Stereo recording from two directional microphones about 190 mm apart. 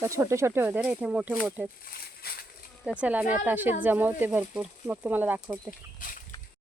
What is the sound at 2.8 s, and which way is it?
Speech, 5° right (ahead or behind).